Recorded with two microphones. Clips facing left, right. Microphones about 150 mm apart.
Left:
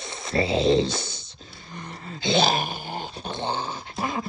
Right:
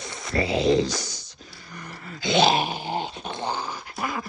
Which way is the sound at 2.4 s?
45° left (ahead or behind).